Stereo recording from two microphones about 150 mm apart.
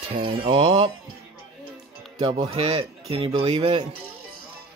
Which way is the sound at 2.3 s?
45° right (ahead or behind).